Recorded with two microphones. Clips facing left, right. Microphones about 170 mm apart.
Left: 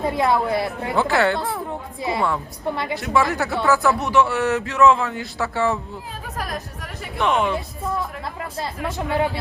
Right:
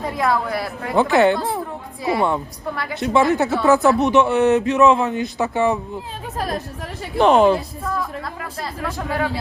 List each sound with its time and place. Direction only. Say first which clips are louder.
0.0 s a woman's voice: left 1 dB; 25° left (ahead or behind)
0.9 s speech: right 5 dB; 20° right (ahead or behind)
6.3 s speech: right 5 dB; 30° right (ahead or behind)
7.9 s speech: right 1 dB; 25° left (ahead or behind)